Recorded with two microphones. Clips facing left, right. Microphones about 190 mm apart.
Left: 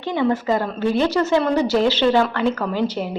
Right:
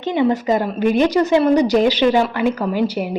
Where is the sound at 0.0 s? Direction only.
20° right (ahead or behind).